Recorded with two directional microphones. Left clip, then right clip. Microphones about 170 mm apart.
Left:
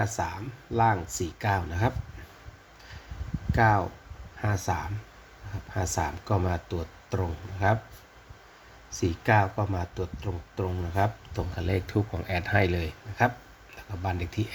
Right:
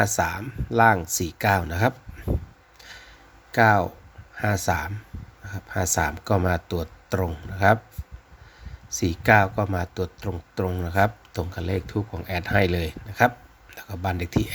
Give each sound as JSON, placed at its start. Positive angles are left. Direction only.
{"t": 0.0, "sound": "speech", "side_deg": -45}
{"t": 3.5, "sound": "speech", "side_deg": -40}
{"t": 9.0, "sound": "speech", "side_deg": -45}
{"t": 11.5, "sound": "speech", "side_deg": -25}
{"t": 11.9, "sound": "speech", "side_deg": -10}